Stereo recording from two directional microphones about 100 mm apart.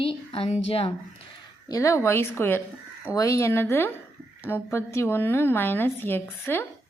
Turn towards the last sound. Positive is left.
turn(degrees=20)  # may be behind; listen again after turning